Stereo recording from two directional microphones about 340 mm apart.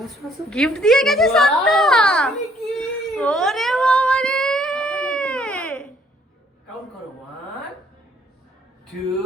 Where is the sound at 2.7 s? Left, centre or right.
Centre.